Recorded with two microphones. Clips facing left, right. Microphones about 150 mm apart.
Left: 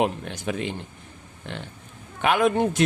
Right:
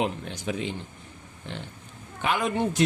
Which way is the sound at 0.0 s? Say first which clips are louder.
Left 4 dB; 60° left (ahead or behind).